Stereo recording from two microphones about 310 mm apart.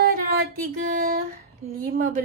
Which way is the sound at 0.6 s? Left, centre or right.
Right.